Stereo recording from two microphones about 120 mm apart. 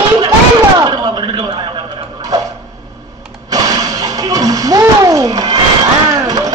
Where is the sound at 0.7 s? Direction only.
35° right (ahead or behind).